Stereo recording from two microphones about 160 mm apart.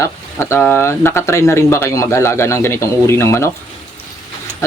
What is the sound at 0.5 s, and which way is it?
Speech, 15° left (ahead or behind).